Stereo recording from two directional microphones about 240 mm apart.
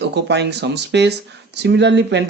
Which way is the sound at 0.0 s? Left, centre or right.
Right.